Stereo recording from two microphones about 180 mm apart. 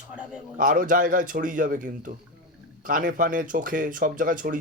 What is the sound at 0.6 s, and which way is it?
Speech, 50° right (ahead or behind).